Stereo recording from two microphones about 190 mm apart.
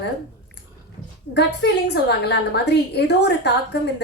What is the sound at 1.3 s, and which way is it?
A woman's voice, 65° left (ahead or behind).